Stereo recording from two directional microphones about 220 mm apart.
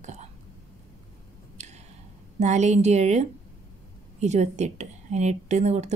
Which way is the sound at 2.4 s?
30° right (ahead or behind).